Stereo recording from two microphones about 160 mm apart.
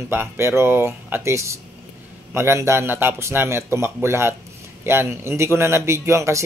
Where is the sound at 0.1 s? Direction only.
15° right (ahead or behind).